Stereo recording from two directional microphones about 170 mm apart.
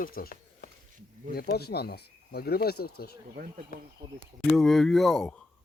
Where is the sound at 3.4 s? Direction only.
60° right (ahead or behind).